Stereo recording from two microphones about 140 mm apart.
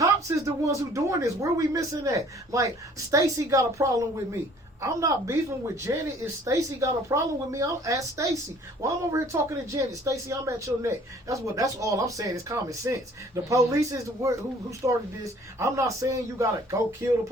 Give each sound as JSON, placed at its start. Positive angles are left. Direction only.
{"t": 0.0, "sound": "speech", "side_deg": -20}